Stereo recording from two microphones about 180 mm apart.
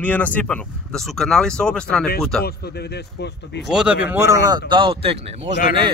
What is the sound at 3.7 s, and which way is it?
Speech, 5° right (ahead or behind).